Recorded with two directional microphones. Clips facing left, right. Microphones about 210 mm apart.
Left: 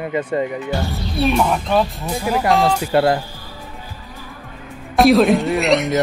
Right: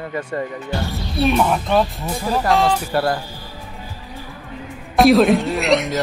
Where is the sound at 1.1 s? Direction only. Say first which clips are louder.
Even; centre (ahead or behind).